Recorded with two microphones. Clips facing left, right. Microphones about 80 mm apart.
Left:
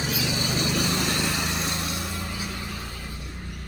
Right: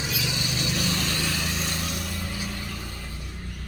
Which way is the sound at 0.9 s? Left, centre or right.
Centre.